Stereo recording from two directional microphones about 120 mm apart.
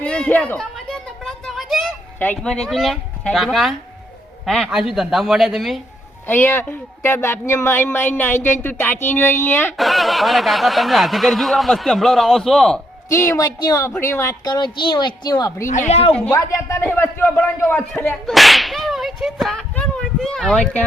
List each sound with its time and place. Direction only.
0.0 s speech: 10° left (ahead or behind)
0.6 s a sound: 5° left (ahead or behind)
2.1 s speech: 15° left (ahead or behind)
6.2 s speech: 15° left (ahead or behind)
9.7 s speech: centre (ahead or behind)
13.1 s speech: 25° left (ahead or behind)
14.4 s a woman's voice: 35° left (ahead or behind)
15.6 s a woman's voice: 85° left; by 16.1 s 60° left (ahead or behind)
16.3 s speech: 25° left (ahead or behind)
18.3 s speech: centre (ahead or behind)